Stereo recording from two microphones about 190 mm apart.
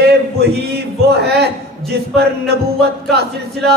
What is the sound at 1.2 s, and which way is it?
Speech, 60° right (ahead or behind).